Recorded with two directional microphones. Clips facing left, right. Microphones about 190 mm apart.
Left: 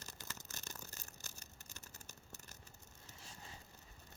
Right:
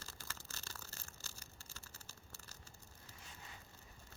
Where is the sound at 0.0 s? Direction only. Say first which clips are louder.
Left 1 dB; 20° left (ahead or behind).